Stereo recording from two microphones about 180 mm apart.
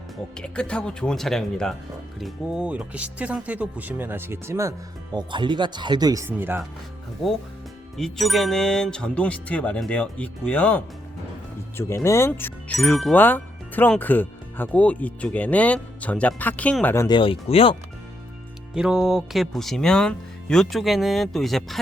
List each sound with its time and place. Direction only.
0.3 s speech: 5° left (ahead or behind); by 4.7 s 15° right (ahead or behind)
5.1 s speech: 25° right (ahead or behind)
7.9 s speech: centre (ahead or behind)
17.2 s speech: 30° left (ahead or behind)
18.7 s speech: 5° right (ahead or behind)